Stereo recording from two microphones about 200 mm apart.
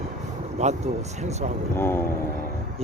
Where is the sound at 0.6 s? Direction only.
30° right (ahead or behind).